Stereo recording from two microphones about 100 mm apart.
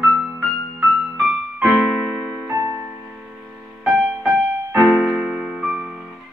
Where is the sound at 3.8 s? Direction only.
10° right (ahead or behind).